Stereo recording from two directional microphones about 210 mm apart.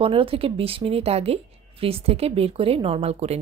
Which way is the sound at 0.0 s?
25° right (ahead or behind).